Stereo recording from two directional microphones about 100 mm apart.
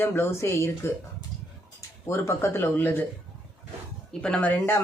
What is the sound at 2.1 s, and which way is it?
Speech, 25° left (ahead or behind).